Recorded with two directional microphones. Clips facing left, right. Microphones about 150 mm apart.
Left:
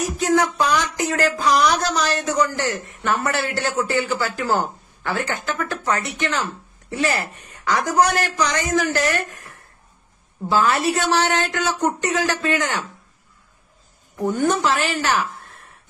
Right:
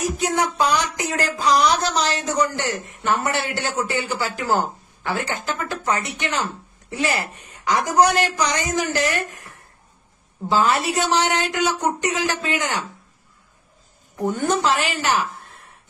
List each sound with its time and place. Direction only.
0.2 s a man's voice: 20° right (ahead or behind)
14.1 s speech: 20° right (ahead or behind)